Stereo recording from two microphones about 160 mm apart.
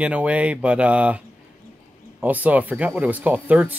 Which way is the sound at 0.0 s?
10° right (ahead or behind).